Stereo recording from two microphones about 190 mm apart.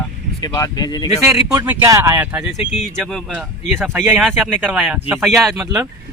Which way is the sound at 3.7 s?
10° right (ahead or behind).